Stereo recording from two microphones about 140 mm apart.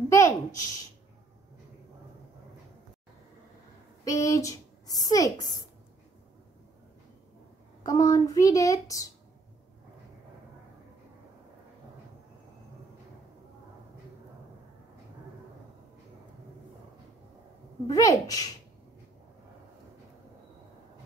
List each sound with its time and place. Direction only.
0.1 s a sound: 20° left (ahead or behind)
4.0 s a woman's voice: 20° left (ahead or behind)
7.8 s a woman's voice: 25° left (ahead or behind)
17.8 s a woman's voice: 25° left (ahead or behind)